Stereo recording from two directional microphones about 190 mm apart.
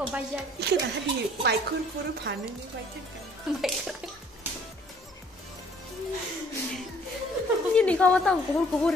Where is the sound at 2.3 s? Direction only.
65° right (ahead or behind).